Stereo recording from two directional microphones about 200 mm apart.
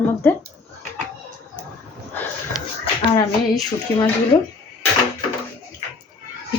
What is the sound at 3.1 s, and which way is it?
Speech, 20° left (ahead or behind).